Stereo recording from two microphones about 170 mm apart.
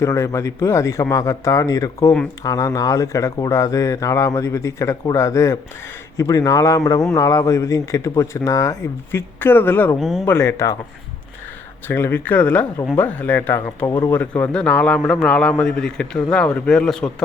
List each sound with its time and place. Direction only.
0.0 s a man's voice: 20° left (ahead or behind)
10.0 s speech: centre (ahead or behind)
10.2 s a man's voice: 15° left (ahead or behind)
11.9 s a man's voice: 15° left (ahead or behind)